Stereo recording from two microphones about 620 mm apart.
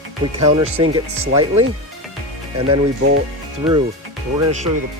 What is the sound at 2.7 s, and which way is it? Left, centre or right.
Speech, centre.